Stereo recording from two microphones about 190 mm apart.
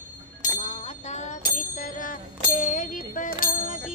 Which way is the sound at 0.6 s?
40° left (ahead or behind).